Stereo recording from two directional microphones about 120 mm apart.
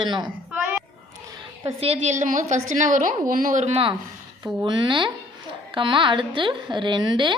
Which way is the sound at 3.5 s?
75° right (ahead or behind).